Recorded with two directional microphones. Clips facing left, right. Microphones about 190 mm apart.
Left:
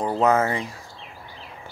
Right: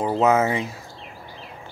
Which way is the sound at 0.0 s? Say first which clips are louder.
Right 1 dB; 5° right (ahead or behind).